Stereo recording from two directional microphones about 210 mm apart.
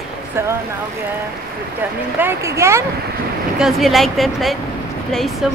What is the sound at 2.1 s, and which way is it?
Speech, 10° right (ahead or behind).